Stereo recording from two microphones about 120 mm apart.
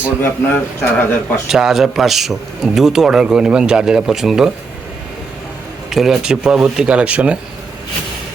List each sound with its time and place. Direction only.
0.2 s a man's voice: 20° left (ahead or behind)
1.5 s a man's voice: 5° right (ahead or behind)
5.9 s speech: 5° right (ahead or behind)